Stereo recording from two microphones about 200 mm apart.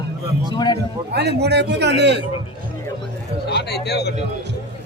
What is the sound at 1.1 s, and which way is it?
A man's voice, 55° right (ahead or behind).